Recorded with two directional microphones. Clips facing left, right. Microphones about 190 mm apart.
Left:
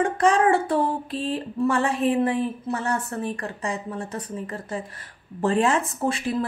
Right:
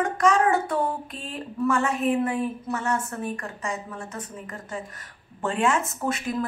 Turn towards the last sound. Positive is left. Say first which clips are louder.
# left 2 dB
turn(degrees=30)  # may be behind; listen again after turning